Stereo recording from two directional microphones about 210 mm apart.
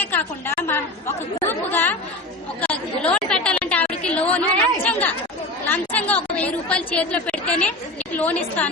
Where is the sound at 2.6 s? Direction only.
5° left (ahead or behind).